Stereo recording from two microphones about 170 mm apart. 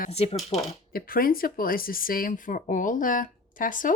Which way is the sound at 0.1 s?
40° left (ahead or behind).